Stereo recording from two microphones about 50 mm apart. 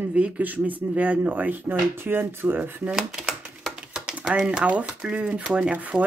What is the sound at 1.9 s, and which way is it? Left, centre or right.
Speech, right.